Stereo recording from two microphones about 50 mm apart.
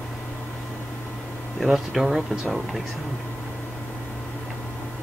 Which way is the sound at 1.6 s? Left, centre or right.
Centre.